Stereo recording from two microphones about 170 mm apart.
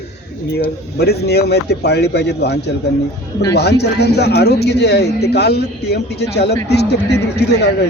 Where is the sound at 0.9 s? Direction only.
75° left (ahead or behind).